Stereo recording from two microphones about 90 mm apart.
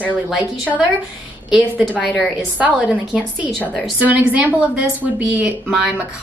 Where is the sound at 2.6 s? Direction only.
15° right (ahead or behind).